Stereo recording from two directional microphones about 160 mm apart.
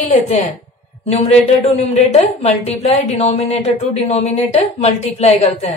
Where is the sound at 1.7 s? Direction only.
45° left (ahead or behind).